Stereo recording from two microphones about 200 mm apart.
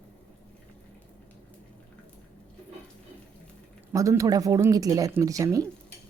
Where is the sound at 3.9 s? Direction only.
15° right (ahead or behind).